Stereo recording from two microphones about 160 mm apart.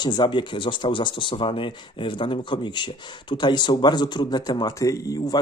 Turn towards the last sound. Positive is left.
turn(degrees=20)  # may be behind; listen again after turning